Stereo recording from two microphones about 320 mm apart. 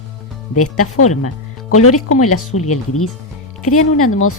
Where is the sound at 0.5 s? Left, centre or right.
Left.